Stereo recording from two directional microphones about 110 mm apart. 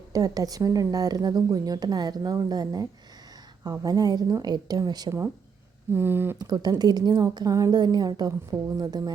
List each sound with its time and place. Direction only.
0.1 s speech: 35° right (ahead or behind)
5.9 s speech: 20° right (ahead or behind)
6.4 s speech: 40° right (ahead or behind)